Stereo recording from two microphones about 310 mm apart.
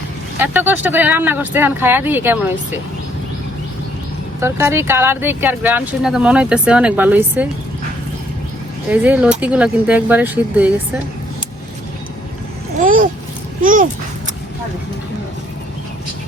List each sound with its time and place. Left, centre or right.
0.3 s speech: centre
4.4 s speech: centre
8.9 s speech: centre
12.7 s a child's voice: right